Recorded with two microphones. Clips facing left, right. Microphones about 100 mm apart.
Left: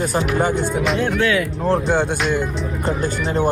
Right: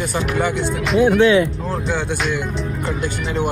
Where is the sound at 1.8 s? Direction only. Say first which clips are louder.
Left 3 dB; 50° left (ahead or behind).